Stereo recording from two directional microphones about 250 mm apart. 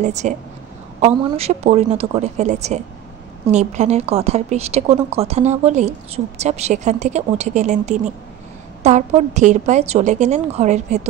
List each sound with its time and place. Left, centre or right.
0.0 s speech: right